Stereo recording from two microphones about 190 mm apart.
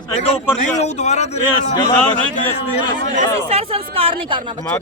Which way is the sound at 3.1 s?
35° right (ahead or behind).